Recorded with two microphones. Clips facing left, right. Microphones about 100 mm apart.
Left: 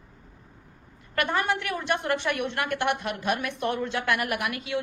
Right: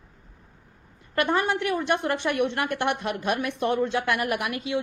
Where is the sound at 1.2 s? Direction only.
30° right (ahead or behind).